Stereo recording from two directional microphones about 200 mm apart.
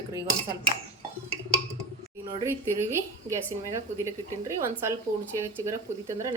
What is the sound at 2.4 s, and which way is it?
A woman's voice, 15° right (ahead or behind).